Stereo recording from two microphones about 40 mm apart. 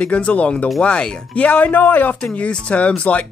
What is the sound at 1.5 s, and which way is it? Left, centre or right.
Speech, left.